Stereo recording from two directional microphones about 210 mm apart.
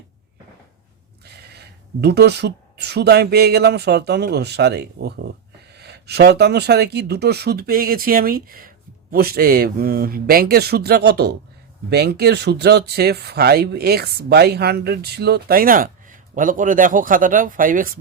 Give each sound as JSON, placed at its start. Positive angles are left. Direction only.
{"t": 1.2, "sound": "speech", "side_deg": -50}